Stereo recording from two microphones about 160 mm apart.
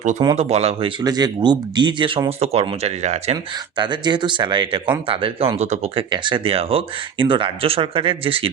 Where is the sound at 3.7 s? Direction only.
30° right (ahead or behind).